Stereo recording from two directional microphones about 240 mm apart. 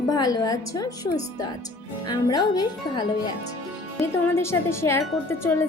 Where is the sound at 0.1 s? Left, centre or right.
Centre.